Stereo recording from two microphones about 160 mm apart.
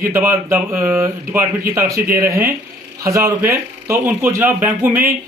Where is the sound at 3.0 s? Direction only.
20° right (ahead or behind).